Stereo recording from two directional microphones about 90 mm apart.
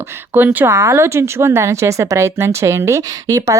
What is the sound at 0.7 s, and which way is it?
A woman's voice, 30° right (ahead or behind).